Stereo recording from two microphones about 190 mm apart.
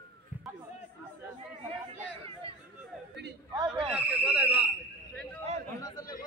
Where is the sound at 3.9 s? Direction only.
5° right (ahead or behind).